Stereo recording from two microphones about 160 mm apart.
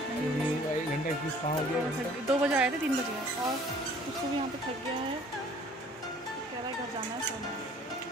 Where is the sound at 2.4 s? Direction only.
5° right (ahead or behind).